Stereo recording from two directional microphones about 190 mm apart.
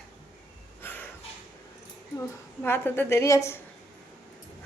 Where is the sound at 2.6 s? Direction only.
10° left (ahead or behind).